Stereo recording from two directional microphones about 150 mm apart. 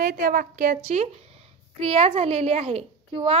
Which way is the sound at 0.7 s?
45° right (ahead or behind).